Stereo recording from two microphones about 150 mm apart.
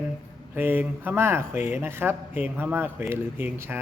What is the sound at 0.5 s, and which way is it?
Speech, 15° right (ahead or behind).